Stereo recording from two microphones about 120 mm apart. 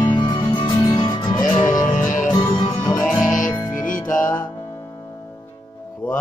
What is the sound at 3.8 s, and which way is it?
Music, 90° left.